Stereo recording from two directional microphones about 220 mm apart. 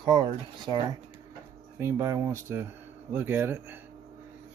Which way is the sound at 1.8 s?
10° right (ahead or behind).